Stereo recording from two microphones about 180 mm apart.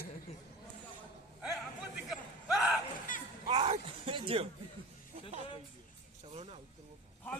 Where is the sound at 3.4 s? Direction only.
35° right (ahead or behind).